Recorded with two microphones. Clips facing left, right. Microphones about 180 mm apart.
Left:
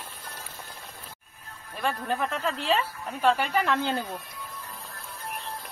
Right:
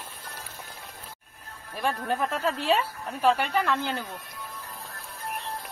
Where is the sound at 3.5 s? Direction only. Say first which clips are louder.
Even; 15° left (ahead or behind).